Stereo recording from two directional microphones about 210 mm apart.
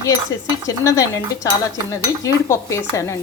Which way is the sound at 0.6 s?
15° left (ahead or behind).